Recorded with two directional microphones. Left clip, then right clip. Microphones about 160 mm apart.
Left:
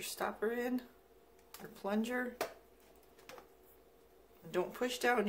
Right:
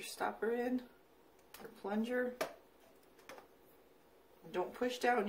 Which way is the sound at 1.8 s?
55° left (ahead or behind).